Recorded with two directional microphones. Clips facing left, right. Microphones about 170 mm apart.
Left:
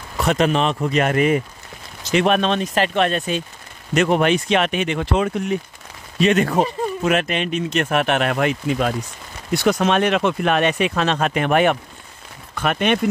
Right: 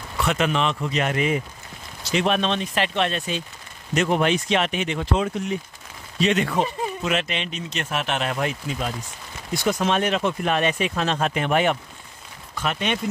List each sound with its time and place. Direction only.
0.2 s speech: 40° left (ahead or behind)
0.8 s speech: 55° left (ahead or behind)
3.9 s speech: 65° left (ahead or behind)
6.1 s speech: 50° left (ahead or behind)